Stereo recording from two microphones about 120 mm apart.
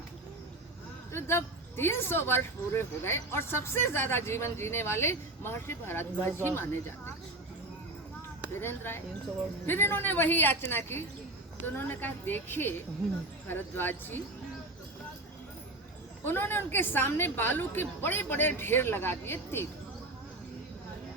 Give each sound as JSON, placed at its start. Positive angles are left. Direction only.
{"t": 1.1, "sound": "speech", "side_deg": 20}
{"t": 8.5, "sound": "a woman's voice", "side_deg": 20}
{"t": 16.2, "sound": "a woman's voice", "side_deg": 20}